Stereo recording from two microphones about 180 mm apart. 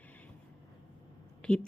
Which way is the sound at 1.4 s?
5° left (ahead or behind).